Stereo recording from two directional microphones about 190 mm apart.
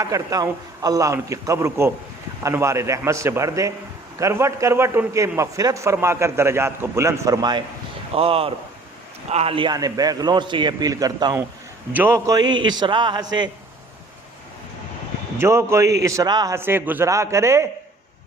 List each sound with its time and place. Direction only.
0.0 s a man's voice: 20° right (ahead or behind)
8.1 s a man's voice: 30° right (ahead or behind)
15.4 s a man's voice: 15° right (ahead or behind)